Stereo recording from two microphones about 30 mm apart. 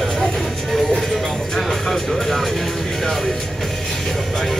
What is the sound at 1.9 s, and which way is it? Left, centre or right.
Music, centre.